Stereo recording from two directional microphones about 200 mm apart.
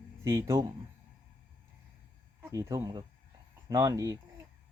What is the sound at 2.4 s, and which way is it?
Speech, 15° right (ahead or behind).